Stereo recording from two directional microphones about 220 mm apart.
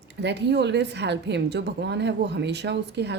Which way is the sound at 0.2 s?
50° right (ahead or behind).